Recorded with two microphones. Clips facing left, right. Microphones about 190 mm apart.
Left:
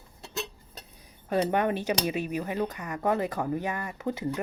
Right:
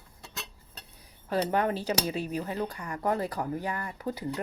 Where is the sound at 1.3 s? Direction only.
25° left (ahead or behind).